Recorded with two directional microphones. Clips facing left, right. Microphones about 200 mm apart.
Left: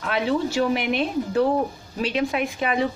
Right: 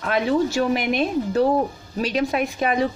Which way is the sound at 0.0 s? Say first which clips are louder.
Right 3 dB; 45° right (ahead or behind).